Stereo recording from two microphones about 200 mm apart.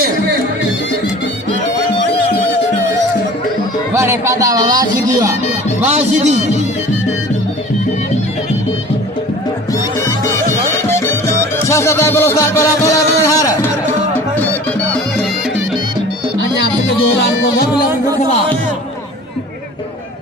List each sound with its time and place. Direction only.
3.9 s speech: 15° right (ahead or behind)
5.9 s speech: 35° right (ahead or behind)
10.8 s music: 15° left (ahead or behind)
16.4 s music: 60° left (ahead or behind)